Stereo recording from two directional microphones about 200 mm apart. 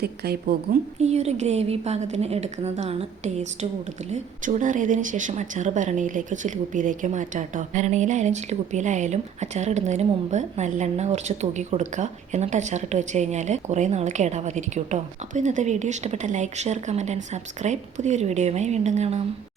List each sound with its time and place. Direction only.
0.0 s a woman's voice: 55° right (ahead or behind)
0.9 s a woman's voice: 30° right (ahead or behind)